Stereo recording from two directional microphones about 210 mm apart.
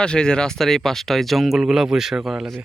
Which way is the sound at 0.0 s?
5° left (ahead or behind).